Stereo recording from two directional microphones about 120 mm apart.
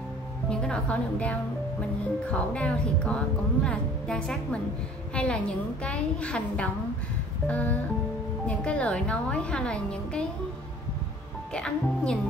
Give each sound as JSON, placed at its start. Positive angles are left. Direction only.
{"t": 0.5, "sound": "a woman's voice", "side_deg": 10}
{"t": 11.5, "sound": "a woman's voice", "side_deg": 5}